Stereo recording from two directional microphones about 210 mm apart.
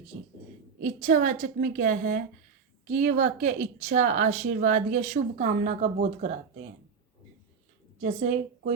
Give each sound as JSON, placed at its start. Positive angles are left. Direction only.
{"t": 0.8, "sound": "a woman's voice", "side_deg": -40}
{"t": 8.0, "sound": "a woman's voice", "side_deg": -30}